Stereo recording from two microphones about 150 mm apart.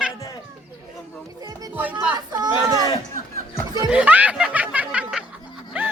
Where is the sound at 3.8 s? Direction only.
10° right (ahead or behind).